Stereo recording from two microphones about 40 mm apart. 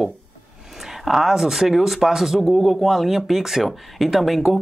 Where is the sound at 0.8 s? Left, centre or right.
Centre.